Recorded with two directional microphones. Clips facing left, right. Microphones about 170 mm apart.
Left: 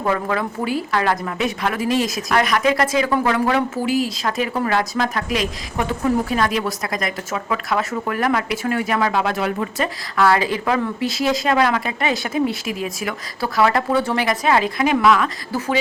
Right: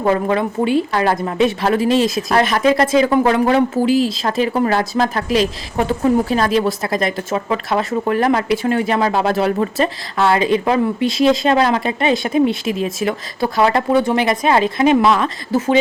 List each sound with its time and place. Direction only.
0.0 s speech: 25° right (ahead or behind)